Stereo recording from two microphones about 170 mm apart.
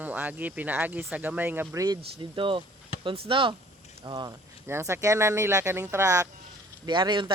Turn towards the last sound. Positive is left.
turn(degrees=-25)  # may be behind; listen again after turning